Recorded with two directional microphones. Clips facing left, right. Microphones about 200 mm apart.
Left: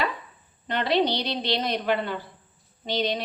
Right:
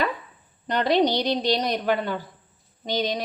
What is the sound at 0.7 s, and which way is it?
A woman's voice, 45° right (ahead or behind).